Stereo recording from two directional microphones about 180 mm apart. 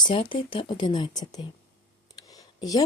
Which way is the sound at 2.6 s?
20° left (ahead or behind).